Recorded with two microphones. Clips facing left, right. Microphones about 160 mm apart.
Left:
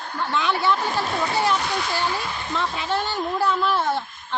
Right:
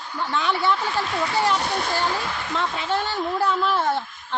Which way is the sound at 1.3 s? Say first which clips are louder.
Right 1 dB; 10° left (ahead or behind).